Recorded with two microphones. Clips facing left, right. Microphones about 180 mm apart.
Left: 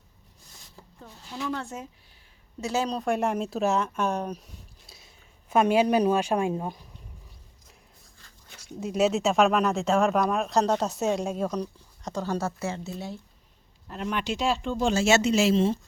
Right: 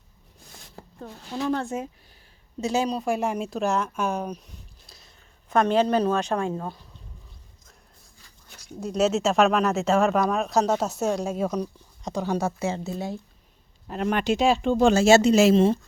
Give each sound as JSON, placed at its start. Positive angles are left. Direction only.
{"t": 0.6, "sound": "a sound", "side_deg": -60}
{"t": 1.3, "sound": "speech", "side_deg": -40}
{"t": 2.6, "sound": "speech", "side_deg": -20}
{"t": 8.7, "sound": "speech", "side_deg": 0}
{"t": 12.7, "sound": "speech", "side_deg": -45}
{"t": 13.8, "sound": "speech", "side_deg": -55}
{"t": 15.0, "sound": "speech", "side_deg": -35}